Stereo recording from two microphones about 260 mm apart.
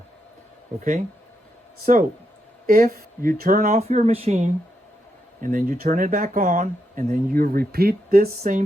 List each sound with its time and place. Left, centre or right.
1.8 s speech: right